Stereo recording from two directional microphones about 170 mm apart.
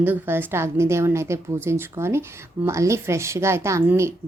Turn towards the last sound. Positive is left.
turn(degrees=-15)  # may be behind; listen again after turning